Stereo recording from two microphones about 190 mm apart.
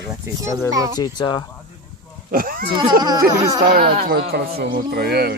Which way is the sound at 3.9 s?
55° right (ahead or behind).